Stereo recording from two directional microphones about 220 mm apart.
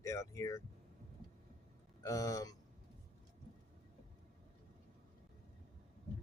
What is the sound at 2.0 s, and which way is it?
Speech, 15° left (ahead or behind).